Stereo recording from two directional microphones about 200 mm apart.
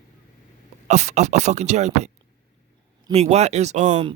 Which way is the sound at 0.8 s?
35° right (ahead or behind).